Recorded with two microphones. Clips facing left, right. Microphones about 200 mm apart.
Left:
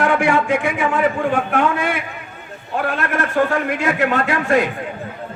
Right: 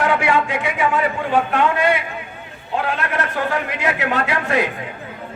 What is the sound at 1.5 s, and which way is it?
Speech, 50° left (ahead or behind).